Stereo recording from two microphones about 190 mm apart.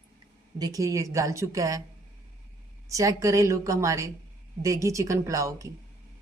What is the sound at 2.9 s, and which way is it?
Speech, 15° right (ahead or behind).